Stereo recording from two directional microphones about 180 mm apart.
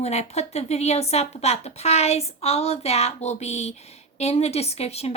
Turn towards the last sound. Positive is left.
turn(degrees=35)  # may be behind; listen again after turning